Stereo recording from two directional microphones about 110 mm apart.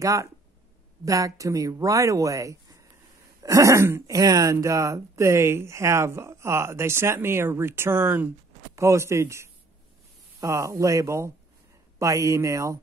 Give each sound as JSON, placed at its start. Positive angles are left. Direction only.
{"t": 0.0, "sound": "speech", "side_deg": -30}